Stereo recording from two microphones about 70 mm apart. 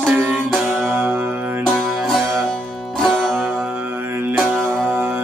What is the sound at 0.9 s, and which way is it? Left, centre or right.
Music, right.